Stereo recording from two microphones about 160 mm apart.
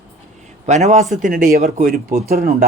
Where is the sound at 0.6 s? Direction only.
45° right (ahead or behind).